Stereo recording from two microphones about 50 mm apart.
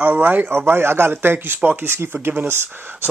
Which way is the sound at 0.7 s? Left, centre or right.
Right.